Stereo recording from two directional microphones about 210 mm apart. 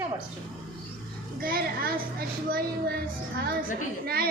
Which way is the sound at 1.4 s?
45° right (ahead or behind).